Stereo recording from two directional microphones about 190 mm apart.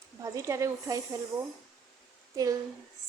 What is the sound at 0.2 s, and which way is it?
Speech, 15° right (ahead or behind).